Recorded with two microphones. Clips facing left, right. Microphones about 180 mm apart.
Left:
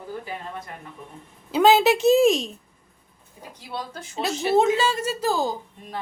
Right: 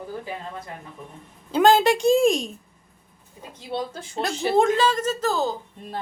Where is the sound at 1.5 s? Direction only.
5° left (ahead or behind).